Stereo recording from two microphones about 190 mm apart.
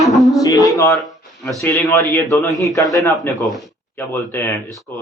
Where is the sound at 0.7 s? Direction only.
15° left (ahead or behind).